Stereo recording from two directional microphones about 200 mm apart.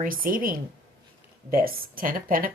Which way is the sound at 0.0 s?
45° right (ahead or behind).